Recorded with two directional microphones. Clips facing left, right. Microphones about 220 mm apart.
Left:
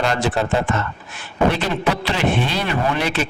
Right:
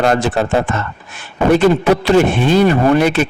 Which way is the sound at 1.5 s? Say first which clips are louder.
Right 10 dB; 45° right (ahead or behind).